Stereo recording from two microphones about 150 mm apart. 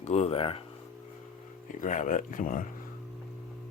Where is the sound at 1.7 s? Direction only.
60° left (ahead or behind).